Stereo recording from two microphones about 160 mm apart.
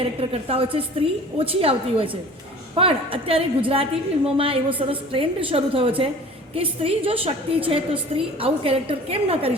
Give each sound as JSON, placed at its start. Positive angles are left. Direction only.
{"t": 0.2, "sound": "a woman's voice", "side_deg": -35}